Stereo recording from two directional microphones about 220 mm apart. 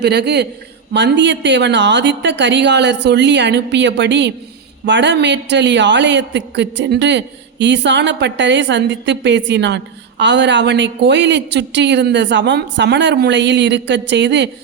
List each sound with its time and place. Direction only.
0.0 s a man's voice: 50° right (ahead or behind)